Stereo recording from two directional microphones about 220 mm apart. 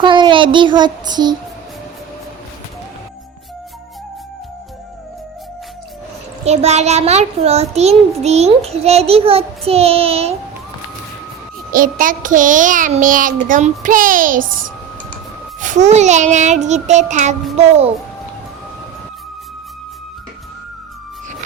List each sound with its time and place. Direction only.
0.0 s child singing: 20° right (ahead or behind)
6.4 s a child's voice: 30° right (ahead or behind)
11.7 s a child's voice: 40° right (ahead or behind)